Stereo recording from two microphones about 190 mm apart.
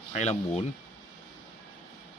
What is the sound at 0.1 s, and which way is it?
Speech, 35° left (ahead or behind).